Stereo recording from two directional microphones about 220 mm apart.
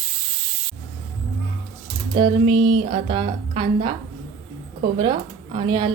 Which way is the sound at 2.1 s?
20° right (ahead or behind).